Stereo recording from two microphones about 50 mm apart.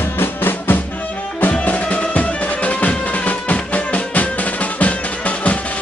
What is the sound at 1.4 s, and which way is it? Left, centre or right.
Music, left.